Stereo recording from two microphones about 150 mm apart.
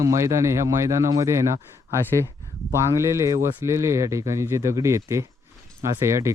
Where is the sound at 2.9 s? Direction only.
20° right (ahead or behind).